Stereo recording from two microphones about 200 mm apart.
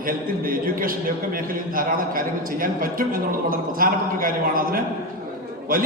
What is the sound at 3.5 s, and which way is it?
A man's voice, 45° right (ahead or behind).